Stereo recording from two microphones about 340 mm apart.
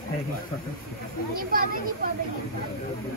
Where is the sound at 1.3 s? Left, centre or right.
Right.